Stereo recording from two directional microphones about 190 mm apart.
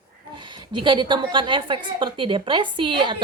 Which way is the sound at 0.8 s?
25° right (ahead or behind).